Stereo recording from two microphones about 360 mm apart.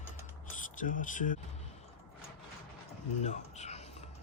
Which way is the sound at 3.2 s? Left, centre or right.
Centre.